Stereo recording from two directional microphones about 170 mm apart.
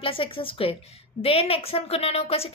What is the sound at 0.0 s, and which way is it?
A woman's voice, 30° left (ahead or behind).